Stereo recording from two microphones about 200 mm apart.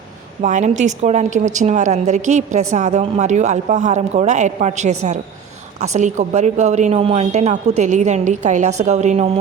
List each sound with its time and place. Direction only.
0.4 s a woman's voice: 35° right (ahead or behind)